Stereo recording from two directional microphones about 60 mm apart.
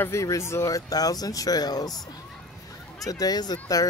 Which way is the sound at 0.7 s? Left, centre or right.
Left.